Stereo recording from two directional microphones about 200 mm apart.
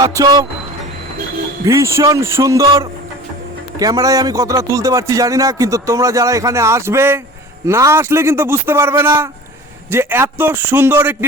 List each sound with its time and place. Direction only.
0.0 s speech: 15° right (ahead or behind)
1.6 s speech: 15° right (ahead or behind)